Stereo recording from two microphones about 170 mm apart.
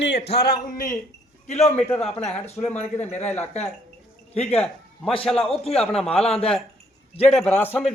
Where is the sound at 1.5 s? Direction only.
40° left (ahead or behind).